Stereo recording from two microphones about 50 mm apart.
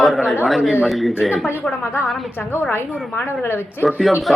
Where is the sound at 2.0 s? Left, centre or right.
Centre.